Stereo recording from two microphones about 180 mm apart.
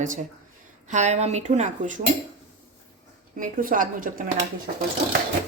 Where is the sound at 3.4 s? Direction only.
50° right (ahead or behind).